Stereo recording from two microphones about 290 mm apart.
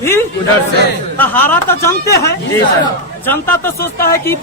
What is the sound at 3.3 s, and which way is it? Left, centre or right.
Speech, centre.